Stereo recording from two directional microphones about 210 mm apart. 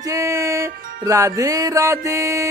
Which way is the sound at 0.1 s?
15° right (ahead or behind).